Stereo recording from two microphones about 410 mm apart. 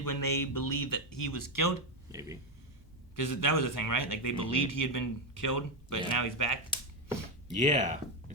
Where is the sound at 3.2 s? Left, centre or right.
Left.